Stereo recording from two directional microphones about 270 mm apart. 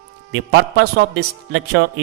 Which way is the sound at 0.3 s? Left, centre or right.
Right.